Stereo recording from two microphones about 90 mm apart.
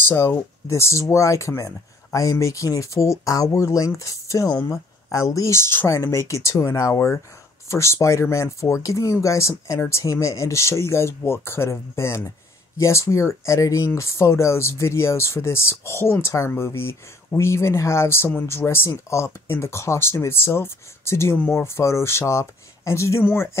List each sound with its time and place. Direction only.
0.1 s speech: 25° left (ahead or behind)